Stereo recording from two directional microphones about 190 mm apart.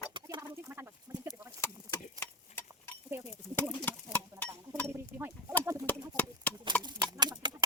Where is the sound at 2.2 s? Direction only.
10° left (ahead or behind).